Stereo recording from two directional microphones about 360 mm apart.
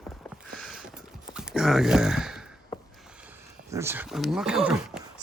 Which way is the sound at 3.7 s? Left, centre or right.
Centre.